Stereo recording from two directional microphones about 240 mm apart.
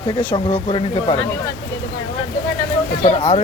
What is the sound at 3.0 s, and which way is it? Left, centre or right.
Speech, left.